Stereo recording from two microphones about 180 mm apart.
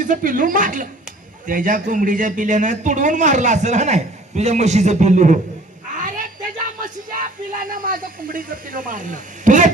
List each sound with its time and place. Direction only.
0.0 s a man's voice: 45° right (ahead or behind)
6.0 s a sound: 45° right (ahead or behind)
6.7 s speech: 50° right (ahead or behind)